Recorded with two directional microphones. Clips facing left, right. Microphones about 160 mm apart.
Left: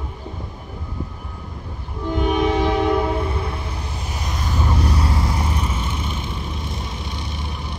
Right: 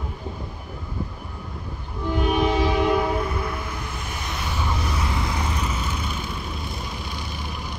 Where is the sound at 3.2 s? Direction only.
30° left (ahead or behind).